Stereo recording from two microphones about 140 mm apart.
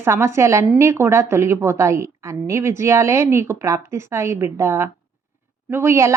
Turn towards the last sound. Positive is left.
turn(degrees=-20)  # may be behind; listen again after turning